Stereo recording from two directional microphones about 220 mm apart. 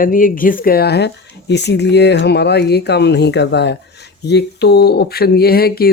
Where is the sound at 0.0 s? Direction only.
40° left (ahead or behind).